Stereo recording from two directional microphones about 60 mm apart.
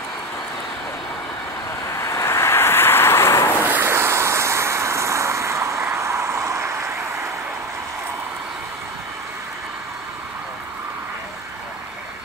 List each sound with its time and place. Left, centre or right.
2.0 s vehicle: left
3.6 s vehicle: right